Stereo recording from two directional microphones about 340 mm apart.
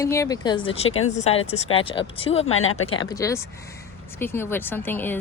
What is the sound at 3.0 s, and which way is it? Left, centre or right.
Speech, centre.